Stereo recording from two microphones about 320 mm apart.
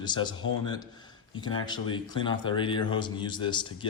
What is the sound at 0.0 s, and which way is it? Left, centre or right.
Speech, centre.